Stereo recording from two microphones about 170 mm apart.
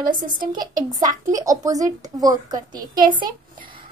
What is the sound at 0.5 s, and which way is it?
A woman's voice, 25° right (ahead or behind).